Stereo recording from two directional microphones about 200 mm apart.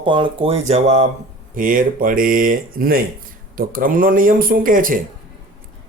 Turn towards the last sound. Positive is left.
turn(degrees=-45)  # may be behind; listen again after turning